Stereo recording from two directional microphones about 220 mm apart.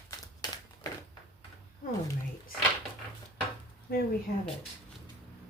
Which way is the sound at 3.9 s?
45° left (ahead or behind).